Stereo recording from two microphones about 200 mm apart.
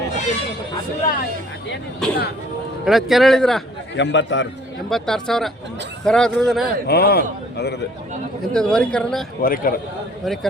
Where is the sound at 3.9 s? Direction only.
65° left (ahead or behind).